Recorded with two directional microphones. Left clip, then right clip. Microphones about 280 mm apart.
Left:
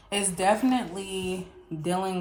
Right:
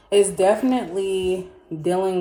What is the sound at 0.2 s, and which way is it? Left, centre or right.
A woman's voice, centre.